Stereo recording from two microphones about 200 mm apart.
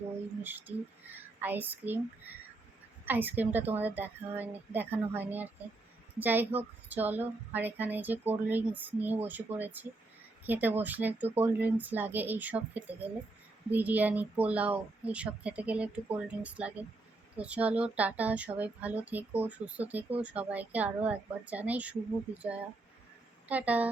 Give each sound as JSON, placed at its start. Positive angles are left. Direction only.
{"t": 1.0, "sound": "speech", "side_deg": -10}
{"t": 23.5, "sound": "speech", "side_deg": -5}